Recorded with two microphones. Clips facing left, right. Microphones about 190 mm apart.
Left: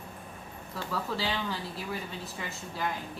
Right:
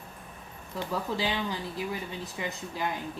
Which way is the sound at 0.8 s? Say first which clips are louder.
Right 3 dB; 15° right (ahead or behind).